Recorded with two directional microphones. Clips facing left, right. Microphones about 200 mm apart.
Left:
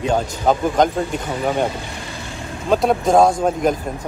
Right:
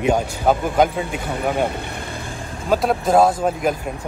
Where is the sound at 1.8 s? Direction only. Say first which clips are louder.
Right 1 dB; 55° right (ahead or behind).